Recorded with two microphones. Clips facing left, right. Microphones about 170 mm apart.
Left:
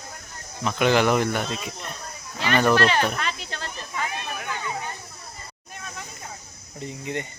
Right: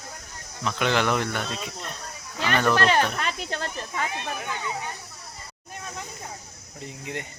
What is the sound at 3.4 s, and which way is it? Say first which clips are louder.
Speech: right 4 dB; 50° right (ahead or behind).